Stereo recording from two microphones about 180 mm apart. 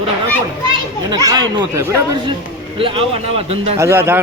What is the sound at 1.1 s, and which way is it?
A man's voice, 20° right (ahead or behind).